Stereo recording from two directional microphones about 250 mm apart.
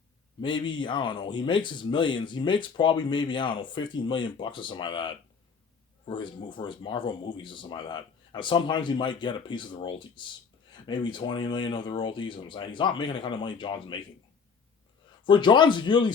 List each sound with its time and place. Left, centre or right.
0.4 s speech: centre
15.2 s speech: centre